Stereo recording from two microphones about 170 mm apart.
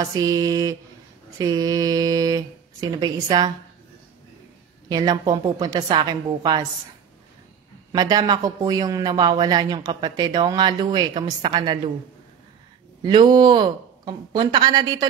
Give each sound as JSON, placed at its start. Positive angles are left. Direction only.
{"t": 0.0, "sound": "a man's voice", "side_deg": -20}
{"t": 4.8, "sound": "a man's voice", "side_deg": -25}
{"t": 7.9, "sound": "a man's voice", "side_deg": -25}
{"t": 13.0, "sound": "a man's voice", "side_deg": -30}